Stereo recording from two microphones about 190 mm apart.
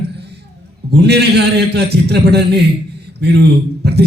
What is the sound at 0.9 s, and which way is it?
Speech, 60° right (ahead or behind).